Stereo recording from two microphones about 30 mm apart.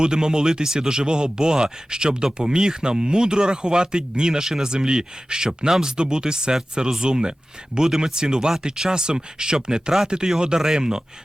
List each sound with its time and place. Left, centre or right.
0.0 s speech: right